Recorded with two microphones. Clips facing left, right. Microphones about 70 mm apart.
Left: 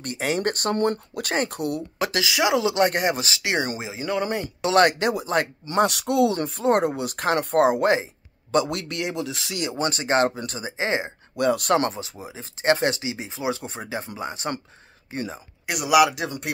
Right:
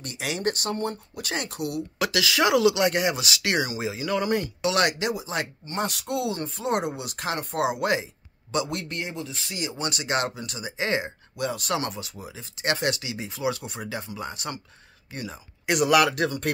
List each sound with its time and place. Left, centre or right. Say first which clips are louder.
0.0 s speech: left 4 dB; left
0.7 s speech: left 7 dB; left
1.3 s speech: left 4 dB; left
2.2 s speech: right 1 dB; centre
2.6 s speech: even; left
3.8 s speech: even; left
4.6 s speech: left 6 dB; left
5.7 s speech: left 8 dB; left
8.6 s speech: left 4 dB; left
9.8 s speech: left 6 dB; left
11.3 s speech: left 7 dB; left
11.9 s speech: left 2 dB; left
15.6 s speech: left 2 dB; centre